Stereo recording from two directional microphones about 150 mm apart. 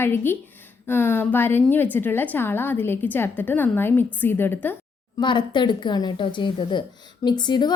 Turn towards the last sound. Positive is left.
turn(degrees=30)  # may be behind; listen again after turning